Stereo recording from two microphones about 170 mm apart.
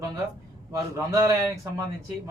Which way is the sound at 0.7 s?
20° right (ahead or behind).